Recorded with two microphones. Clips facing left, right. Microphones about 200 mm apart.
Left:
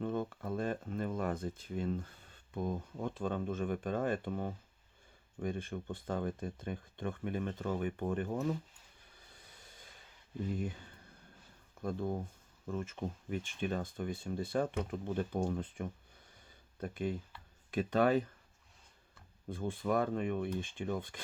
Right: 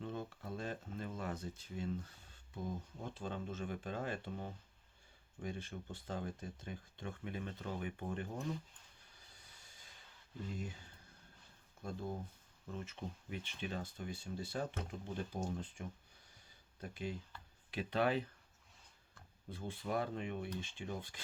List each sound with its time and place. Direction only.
0.0 s speech: 55° left (ahead or behind)
10.6 s speech: 55° left (ahead or behind)
19.5 s speech: 50° left (ahead or behind)